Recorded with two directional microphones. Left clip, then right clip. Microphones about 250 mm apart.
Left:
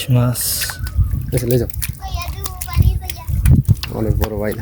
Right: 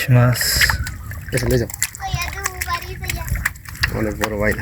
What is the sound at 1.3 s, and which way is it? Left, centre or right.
Speech, left.